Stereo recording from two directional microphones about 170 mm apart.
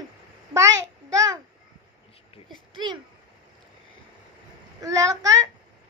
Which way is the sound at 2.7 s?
25° right (ahead or behind).